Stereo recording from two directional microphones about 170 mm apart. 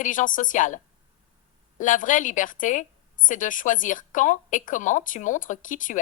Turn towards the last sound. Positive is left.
turn(degrees=50)  # may be behind; listen again after turning